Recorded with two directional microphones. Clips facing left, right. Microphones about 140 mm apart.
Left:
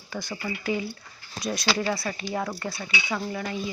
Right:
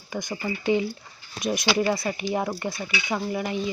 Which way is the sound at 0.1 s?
20° right (ahead or behind).